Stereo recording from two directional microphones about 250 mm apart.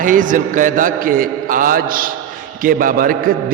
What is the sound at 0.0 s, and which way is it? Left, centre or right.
A man's voice, right.